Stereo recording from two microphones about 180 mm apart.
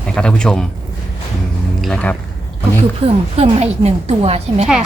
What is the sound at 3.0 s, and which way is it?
A woman's voice, 35° right (ahead or behind).